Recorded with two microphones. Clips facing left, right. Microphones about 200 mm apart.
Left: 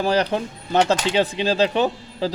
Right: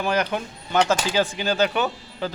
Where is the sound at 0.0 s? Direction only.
35° left (ahead or behind).